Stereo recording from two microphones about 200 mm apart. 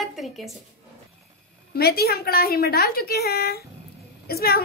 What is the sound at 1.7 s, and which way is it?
A woman's voice, 50° left (ahead or behind).